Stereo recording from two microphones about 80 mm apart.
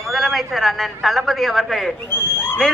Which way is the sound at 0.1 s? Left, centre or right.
Centre.